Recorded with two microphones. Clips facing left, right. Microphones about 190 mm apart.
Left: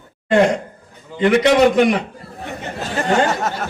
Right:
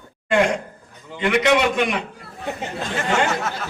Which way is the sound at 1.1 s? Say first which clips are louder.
Left 5 dB; 35° left (ahead or behind).